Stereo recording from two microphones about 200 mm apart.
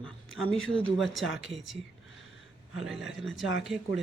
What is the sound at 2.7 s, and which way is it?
Speech, centre (ahead or behind).